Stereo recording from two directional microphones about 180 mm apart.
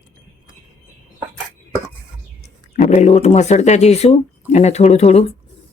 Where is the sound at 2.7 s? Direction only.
40° left (ahead or behind).